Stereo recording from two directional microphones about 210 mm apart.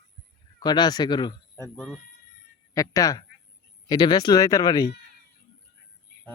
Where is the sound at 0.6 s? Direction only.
20° left (ahead or behind); by 2.0 s 5° left (ahead or behind).